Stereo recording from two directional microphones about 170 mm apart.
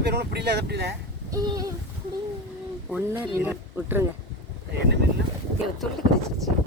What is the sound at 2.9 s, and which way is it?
Speech, 10° right (ahead or behind).